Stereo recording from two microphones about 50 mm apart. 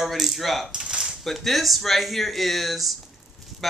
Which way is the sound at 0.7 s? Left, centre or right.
Centre.